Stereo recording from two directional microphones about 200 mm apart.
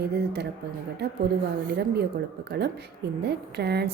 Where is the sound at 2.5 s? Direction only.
55° right (ahead or behind).